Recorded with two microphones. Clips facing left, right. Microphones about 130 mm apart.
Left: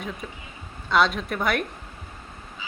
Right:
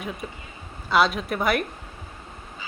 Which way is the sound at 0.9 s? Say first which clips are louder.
Right 1 dB; 5° right (ahead or behind).